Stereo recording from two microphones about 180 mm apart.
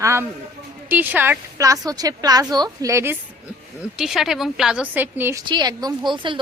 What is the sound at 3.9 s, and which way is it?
A woman's voice, 5° right (ahead or behind).